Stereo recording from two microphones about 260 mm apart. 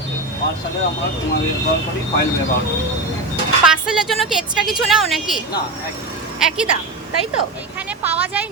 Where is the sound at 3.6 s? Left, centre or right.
Centre.